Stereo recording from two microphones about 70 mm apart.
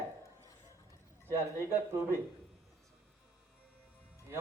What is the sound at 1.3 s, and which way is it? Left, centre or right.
Speech, right.